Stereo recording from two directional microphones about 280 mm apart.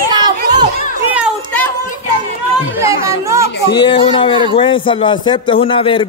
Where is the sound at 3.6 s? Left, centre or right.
Centre.